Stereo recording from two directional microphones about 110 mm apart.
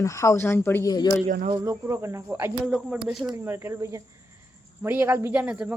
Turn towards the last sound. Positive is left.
turn(degrees=-10)  # may be behind; listen again after turning